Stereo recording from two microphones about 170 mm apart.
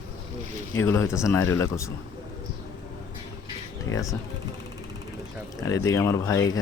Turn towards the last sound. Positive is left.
turn(degrees=20)  # may be behind; listen again after turning